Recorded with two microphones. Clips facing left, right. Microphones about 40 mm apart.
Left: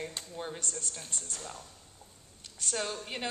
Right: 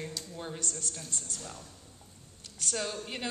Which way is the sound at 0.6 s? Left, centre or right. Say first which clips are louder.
Right 1 dB; left.